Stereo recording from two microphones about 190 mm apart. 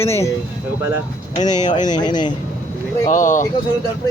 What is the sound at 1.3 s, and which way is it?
Speech, 40° left (ahead or behind).